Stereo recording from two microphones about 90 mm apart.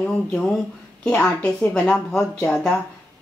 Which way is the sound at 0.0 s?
5° left (ahead or behind).